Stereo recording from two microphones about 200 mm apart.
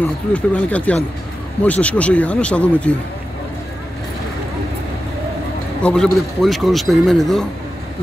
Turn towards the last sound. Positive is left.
turn(degrees=0)  # may be behind; listen again after turning